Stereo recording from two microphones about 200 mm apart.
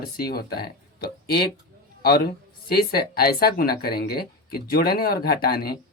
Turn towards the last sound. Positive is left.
turn(degrees=50)  # may be behind; listen again after turning